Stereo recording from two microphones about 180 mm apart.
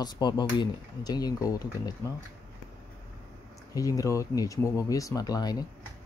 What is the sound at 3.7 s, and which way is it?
Speech, 20° left (ahead or behind).